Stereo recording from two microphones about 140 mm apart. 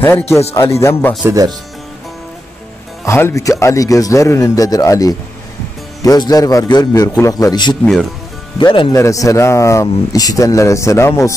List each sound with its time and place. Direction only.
0.6 s speech: 20° left (ahead or behind)
3.1 s speech: 20° left (ahead or behind)
7.8 s speech: centre (ahead or behind)
8.5 s speech: 35° left (ahead or behind)
8.9 s speech: 25° left (ahead or behind)